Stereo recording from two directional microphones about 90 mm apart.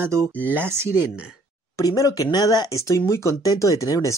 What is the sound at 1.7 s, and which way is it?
Speech, 40° left (ahead or behind).